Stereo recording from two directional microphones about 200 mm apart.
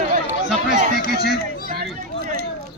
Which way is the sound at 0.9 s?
50° left (ahead or behind).